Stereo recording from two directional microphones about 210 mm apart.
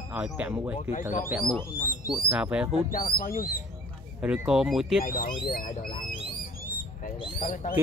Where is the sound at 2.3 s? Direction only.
5° right (ahead or behind).